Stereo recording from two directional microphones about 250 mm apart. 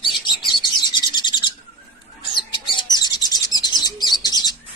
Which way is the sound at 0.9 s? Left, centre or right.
Centre.